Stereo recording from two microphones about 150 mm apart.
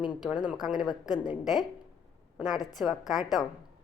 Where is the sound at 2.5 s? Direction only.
25° left (ahead or behind).